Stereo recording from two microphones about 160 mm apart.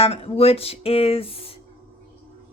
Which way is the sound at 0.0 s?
40° left (ahead or behind).